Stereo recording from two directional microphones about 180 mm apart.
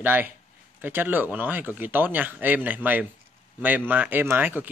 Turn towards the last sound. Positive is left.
turn(degrees=-10)  # may be behind; listen again after turning